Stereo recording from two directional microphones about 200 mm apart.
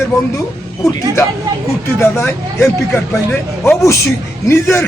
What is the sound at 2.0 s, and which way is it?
Speech, 10° left (ahead or behind).